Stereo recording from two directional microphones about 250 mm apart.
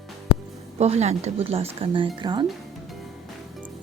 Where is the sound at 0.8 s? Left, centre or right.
Right.